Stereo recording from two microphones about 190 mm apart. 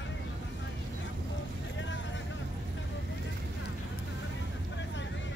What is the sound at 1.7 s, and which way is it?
Vehicle, 75° left (ahead or behind).